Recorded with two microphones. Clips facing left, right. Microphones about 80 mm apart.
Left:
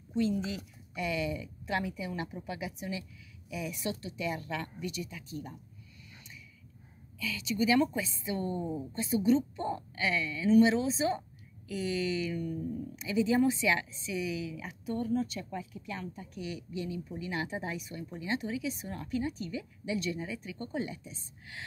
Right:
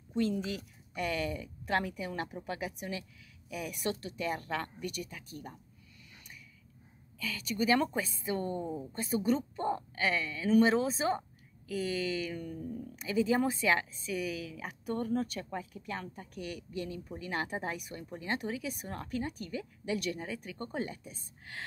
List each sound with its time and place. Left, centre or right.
0.9 s speech: right
7.2 s speech: right